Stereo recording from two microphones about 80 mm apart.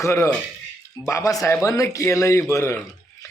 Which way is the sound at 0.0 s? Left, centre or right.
Left.